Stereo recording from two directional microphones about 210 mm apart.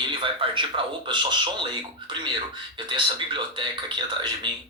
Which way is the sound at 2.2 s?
20° right (ahead or behind).